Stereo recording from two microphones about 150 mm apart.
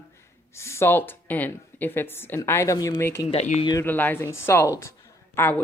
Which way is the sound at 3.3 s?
45° left (ahead or behind).